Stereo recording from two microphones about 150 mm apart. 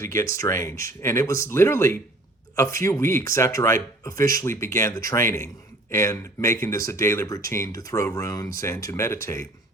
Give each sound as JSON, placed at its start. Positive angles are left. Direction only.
{"t": 0.0, "sound": "speech", "side_deg": 20}